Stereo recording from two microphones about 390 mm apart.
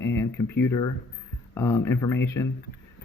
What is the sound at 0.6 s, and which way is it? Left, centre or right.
A man's voice, centre.